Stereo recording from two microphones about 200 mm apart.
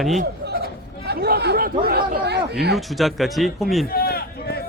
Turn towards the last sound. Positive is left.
turn(degrees=50)  # may be behind; listen again after turning